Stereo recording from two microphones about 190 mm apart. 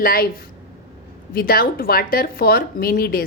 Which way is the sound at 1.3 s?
50° left (ahead or behind).